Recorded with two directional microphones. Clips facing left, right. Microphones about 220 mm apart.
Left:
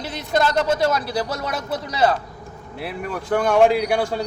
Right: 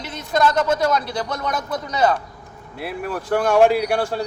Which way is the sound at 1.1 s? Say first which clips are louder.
Even; 30° left (ahead or behind).